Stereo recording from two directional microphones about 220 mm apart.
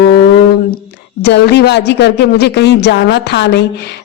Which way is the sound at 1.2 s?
50° left (ahead or behind).